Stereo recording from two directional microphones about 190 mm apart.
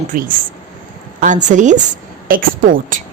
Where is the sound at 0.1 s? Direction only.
45° right (ahead or behind).